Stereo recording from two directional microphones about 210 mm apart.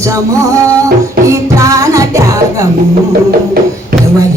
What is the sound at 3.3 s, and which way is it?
Music, 45° right (ahead or behind).